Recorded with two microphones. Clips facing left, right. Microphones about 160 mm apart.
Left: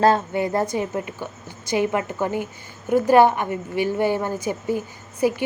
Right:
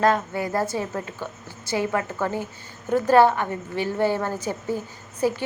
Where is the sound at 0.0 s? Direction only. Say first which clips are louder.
Left 3 dB; 25° left (ahead or behind).